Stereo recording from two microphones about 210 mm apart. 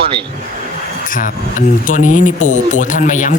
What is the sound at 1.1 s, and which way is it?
Speech, 40° left (ahead or behind).